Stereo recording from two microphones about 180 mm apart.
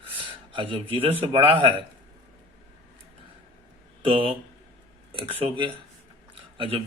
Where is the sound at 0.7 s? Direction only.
30° right (ahead or behind).